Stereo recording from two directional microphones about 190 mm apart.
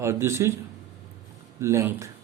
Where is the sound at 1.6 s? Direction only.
15° right (ahead or behind).